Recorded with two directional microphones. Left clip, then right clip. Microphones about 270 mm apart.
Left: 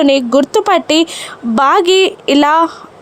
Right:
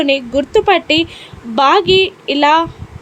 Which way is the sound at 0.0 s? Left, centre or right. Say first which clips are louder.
Left 4 dB; left.